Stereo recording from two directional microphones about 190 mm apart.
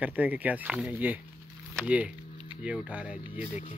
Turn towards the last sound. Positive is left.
turn(degrees=-5)  # may be behind; listen again after turning